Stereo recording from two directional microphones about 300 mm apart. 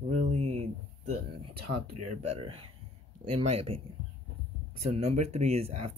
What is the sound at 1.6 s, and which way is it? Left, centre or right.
Speech, right.